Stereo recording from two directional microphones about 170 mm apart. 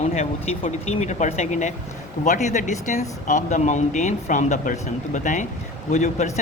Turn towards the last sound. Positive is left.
turn(degrees=40)  # may be behind; listen again after turning